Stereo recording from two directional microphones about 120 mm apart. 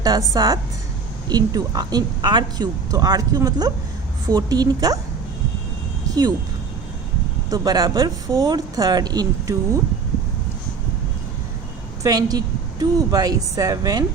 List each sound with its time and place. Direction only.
0.0 s a woman's voice: 35° right (ahead or behind)
6.1 s vehicle: 30° right (ahead or behind)
7.5 s a woman's voice: 35° right (ahead or behind)
12.0 s a woman's voice: 30° right (ahead or behind)